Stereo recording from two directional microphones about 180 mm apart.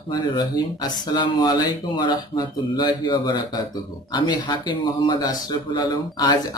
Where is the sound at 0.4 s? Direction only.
25° left (ahead or behind).